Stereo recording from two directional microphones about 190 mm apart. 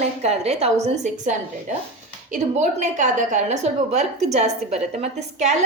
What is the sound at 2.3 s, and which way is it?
A woman's voice, 40° right (ahead or behind).